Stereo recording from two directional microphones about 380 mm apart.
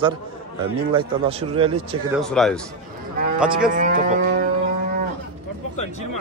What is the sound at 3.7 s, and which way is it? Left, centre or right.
Speech, centre.